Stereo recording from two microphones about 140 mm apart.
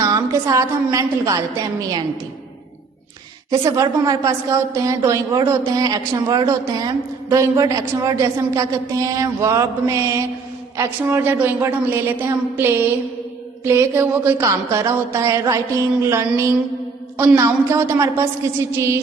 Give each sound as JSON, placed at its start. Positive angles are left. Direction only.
{"t": 0.0, "sound": "a woman's voice", "side_deg": -25}
{"t": 3.6, "sound": "a woman's voice", "side_deg": -25}